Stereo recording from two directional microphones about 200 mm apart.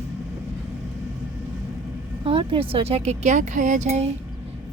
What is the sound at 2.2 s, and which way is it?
Speech, 25° right (ahead or behind).